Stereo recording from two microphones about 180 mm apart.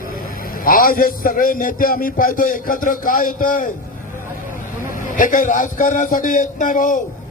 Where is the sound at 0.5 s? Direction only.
50° left (ahead or behind).